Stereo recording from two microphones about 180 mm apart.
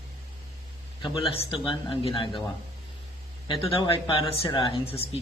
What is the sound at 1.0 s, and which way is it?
Speech, 30° left (ahead or behind).